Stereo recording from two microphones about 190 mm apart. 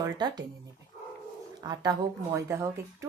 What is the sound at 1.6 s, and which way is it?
A woman's voice, 20° right (ahead or behind).